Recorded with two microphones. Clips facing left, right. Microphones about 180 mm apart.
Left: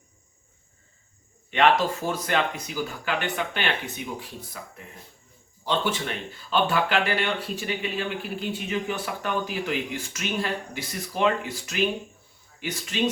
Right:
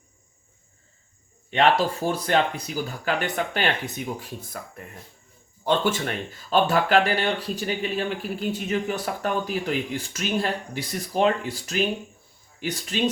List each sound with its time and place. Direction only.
1.5 s speech: 35° right (ahead or behind)
5.6 s speech: 50° right (ahead or behind)